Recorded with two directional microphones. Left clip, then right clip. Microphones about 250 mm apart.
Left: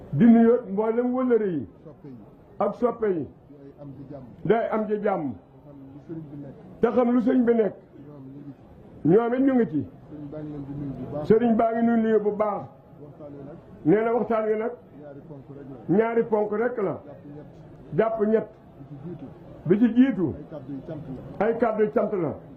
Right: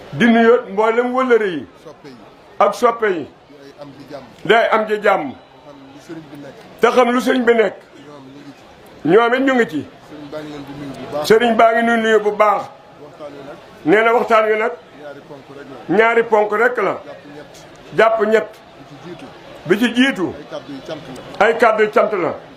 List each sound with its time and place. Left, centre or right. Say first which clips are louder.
0.2 s a man's voice: right 7 dB; centre
2.6 s a man's voice: right 11 dB; centre
4.4 s a man's voice: right 10 dB; centre
6.7 s a man's voice: right 9 dB; centre
9.0 s a man's voice: right 8 dB; centre
11.1 s a man's voice: right 8 dB; right
11.3 s a man's voice: right 13 dB; centre
13.8 s a man's voice: right 9 dB; centre
15.9 s a man's voice: right 9 dB; centre
19.6 s a man's voice: right 6 dB; centre